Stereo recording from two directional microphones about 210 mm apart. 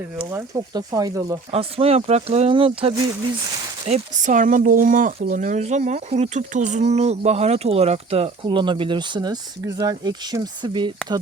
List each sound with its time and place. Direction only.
0.2 s speech: 10° right (ahead or behind)
1.5 s speech: 30° right (ahead or behind)